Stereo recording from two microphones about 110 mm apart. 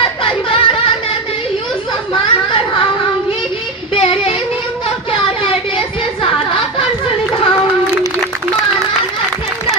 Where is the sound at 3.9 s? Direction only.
60° left (ahead or behind).